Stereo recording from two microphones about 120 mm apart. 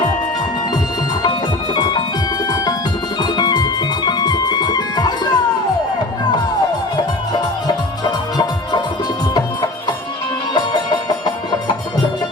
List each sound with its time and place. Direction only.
1.2 s music: 40° left (ahead or behind)
3.2 s music: 35° left (ahead or behind)